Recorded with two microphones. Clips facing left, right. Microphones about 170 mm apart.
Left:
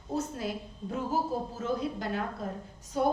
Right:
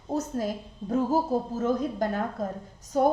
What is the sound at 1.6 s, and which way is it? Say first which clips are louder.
A woman's voice: right 6 dB; 45° right (ahead or behind).